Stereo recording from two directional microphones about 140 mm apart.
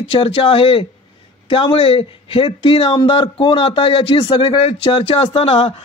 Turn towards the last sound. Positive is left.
turn(degrees=40)  # may be behind; listen again after turning